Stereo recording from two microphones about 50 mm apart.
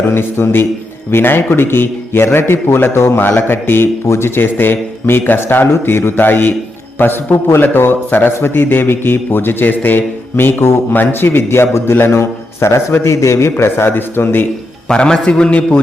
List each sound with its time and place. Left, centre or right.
0.1 s a man's voice: left
3.2 s a man's voice: left
14.8 s a man's voice: centre